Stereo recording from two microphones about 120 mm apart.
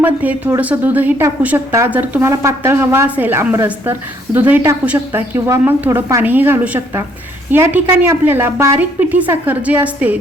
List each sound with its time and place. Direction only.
0.0 s a woman's voice: 15° right (ahead or behind)